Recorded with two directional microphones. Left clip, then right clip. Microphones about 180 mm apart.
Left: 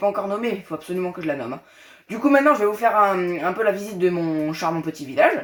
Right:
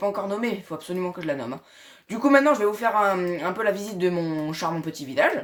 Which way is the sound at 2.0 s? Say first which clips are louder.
Left 2 dB; 30° right (ahead or behind).